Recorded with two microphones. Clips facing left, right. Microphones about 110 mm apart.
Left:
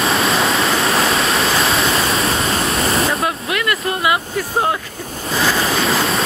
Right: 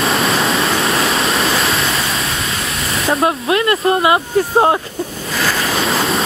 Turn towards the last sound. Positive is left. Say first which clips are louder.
# right 1 dB
turn(degrees=0)  # may be behind; listen again after turning